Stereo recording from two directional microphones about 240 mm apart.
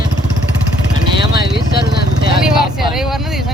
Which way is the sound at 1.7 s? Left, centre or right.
Left.